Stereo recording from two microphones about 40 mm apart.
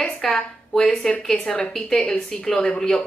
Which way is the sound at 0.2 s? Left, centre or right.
Centre.